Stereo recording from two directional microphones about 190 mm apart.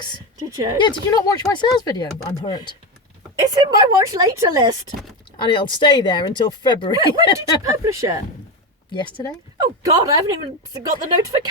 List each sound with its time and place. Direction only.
0.5 s speech: 15° right (ahead or behind)
0.8 s speech: 25° left (ahead or behind)
3.5 s a woman's voice: 20° right (ahead or behind)
5.4 s speech: 25° left (ahead or behind)
7.3 s speech: 15° right (ahead or behind)
8.9 s speech: 25° left (ahead or behind)
9.6 s a woman's voice: 20° right (ahead or behind)